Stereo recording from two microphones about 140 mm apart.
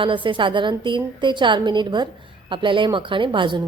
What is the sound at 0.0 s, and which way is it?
A woman's voice, 35° right (ahead or behind).